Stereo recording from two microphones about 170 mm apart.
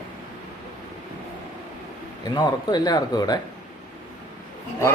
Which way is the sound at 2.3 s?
25° left (ahead or behind).